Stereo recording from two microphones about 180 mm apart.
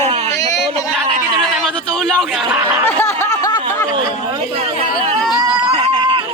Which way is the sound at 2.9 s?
10° left (ahead or behind).